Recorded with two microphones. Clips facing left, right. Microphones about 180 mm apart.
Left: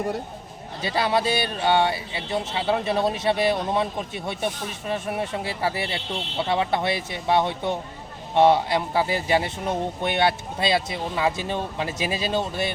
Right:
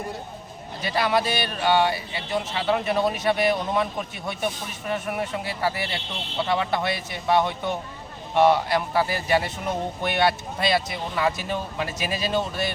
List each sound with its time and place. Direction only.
0.8 s speech: 30° left (ahead or behind)